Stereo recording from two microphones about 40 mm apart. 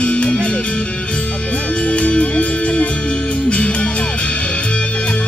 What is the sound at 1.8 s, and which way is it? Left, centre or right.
Music, left.